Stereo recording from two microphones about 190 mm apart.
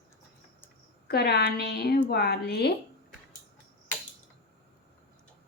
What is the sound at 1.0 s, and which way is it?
Speech, 55° left (ahead or behind).